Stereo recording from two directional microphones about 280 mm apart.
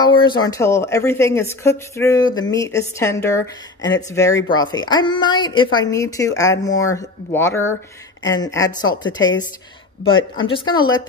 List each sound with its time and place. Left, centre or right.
0.0 s speech: centre